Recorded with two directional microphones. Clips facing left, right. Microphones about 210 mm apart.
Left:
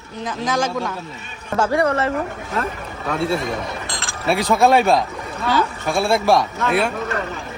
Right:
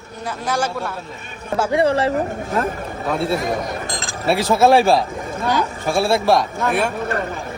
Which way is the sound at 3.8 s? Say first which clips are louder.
Right 2 dB; 40° right (ahead or behind).